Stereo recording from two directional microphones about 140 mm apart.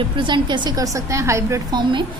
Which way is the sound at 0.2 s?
35° right (ahead or behind).